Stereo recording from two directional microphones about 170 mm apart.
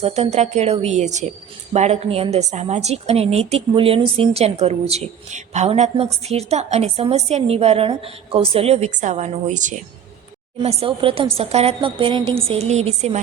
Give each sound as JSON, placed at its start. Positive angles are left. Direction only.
{"t": 0.0, "sound": "a woman's voice", "side_deg": -40}